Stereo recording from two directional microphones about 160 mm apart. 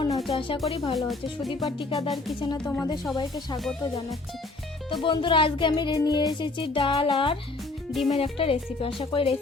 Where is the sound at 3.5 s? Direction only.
Centre (ahead or behind).